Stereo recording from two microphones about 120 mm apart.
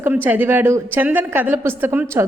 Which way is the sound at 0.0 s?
15° right (ahead or behind).